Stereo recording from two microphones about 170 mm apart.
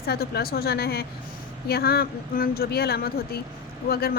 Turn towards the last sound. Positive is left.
turn(degrees=65)  # may be behind; listen again after turning